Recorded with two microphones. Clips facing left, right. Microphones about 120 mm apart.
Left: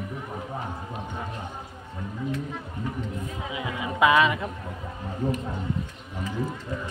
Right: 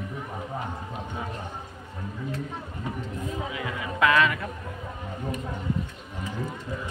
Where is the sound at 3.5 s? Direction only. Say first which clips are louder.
Left 1 dB; 20° left (ahead or behind).